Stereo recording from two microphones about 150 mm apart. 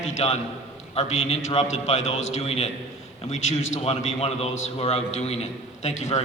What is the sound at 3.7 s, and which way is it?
A man's voice, 45° left (ahead or behind).